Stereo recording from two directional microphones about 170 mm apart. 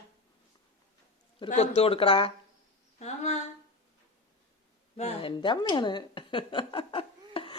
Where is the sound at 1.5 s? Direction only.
40° left (ahead or behind).